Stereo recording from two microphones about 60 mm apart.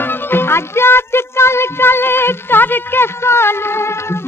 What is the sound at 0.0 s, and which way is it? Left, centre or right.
Music, left.